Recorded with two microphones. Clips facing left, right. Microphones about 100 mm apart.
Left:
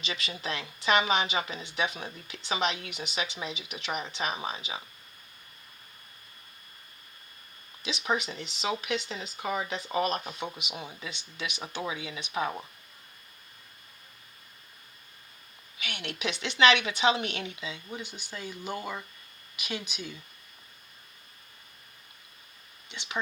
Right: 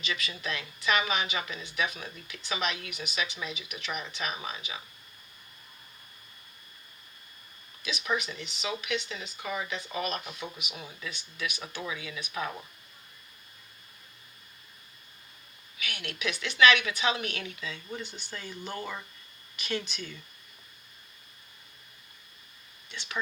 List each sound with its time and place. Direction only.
0.0 s speech: 30° left (ahead or behind)
7.8 s speech: 25° left (ahead or behind)
15.8 s speech: 25° left (ahead or behind)
22.9 s speech: 20° left (ahead or behind)